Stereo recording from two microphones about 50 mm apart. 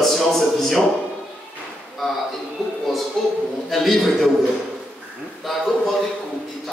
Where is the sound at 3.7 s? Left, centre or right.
Centre.